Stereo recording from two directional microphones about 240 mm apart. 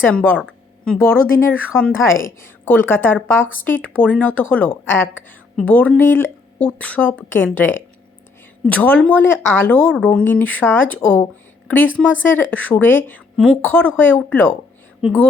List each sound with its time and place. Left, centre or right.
0.0 s a woman's voice: centre